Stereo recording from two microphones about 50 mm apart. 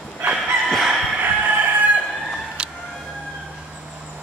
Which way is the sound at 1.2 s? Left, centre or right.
Right.